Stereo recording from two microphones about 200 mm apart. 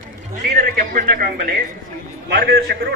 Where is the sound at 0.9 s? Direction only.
45° right (ahead or behind).